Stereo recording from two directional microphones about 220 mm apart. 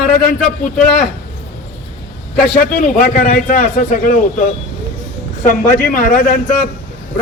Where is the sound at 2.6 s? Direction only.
40° left (ahead or behind).